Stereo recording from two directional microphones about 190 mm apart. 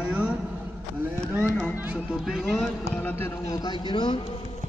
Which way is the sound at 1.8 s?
5° right (ahead or behind).